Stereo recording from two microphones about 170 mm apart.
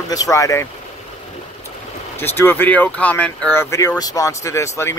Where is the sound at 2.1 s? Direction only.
15° left (ahead or behind).